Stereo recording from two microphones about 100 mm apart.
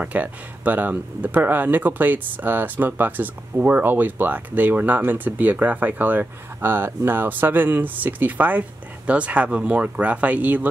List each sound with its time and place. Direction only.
0.0 s speech: 15° right (ahead or behind)